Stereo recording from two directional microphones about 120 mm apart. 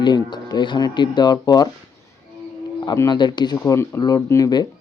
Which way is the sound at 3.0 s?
40° left (ahead or behind).